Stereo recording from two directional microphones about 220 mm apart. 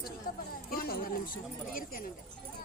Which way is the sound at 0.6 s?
40° left (ahead or behind).